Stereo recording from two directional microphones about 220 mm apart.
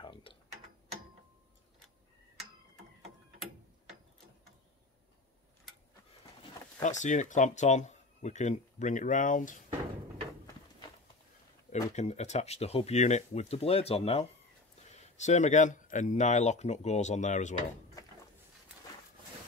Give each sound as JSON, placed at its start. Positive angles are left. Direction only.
{"t": 0.0, "sound": "tick-tock", "side_deg": 25}
{"t": 6.8, "sound": "speech", "side_deg": 35}
{"t": 11.9, "sound": "speech", "side_deg": 30}